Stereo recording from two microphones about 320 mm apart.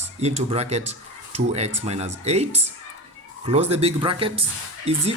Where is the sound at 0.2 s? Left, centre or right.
Centre.